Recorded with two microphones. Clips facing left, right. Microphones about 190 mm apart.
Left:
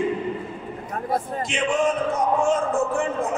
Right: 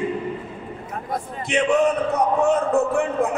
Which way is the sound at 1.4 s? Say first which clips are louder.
Right 6 dB; 60° right (ahead or behind).